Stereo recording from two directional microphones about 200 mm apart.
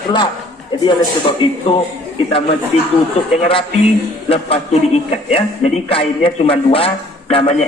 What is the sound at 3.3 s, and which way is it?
A man's voice, 25° left (ahead or behind).